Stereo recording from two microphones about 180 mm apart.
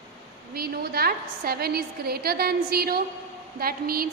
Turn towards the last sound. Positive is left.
turn(degrees=-55)  # may be behind; listen again after turning